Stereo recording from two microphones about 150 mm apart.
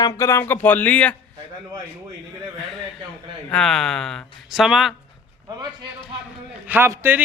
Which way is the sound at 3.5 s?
5° left (ahead or behind).